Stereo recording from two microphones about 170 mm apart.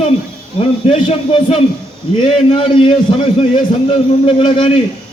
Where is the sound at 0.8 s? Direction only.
35° left (ahead or behind).